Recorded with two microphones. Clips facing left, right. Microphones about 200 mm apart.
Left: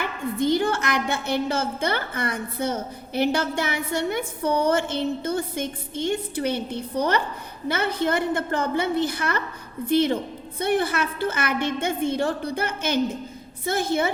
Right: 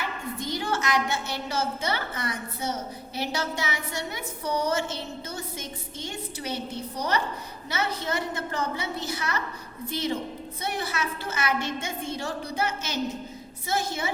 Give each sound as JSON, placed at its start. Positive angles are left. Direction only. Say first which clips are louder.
{"t": 0.0, "sound": "a woman's voice", "louder": "left 8 dB", "side_deg": 55}